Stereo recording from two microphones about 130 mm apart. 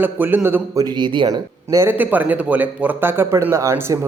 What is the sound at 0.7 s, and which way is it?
Speech, 35° right (ahead or behind).